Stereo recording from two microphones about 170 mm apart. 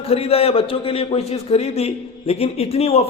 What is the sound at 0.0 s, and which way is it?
A man's voice, 35° left (ahead or behind).